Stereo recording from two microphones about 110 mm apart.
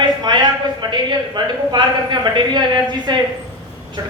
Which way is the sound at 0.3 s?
40° right (ahead or behind).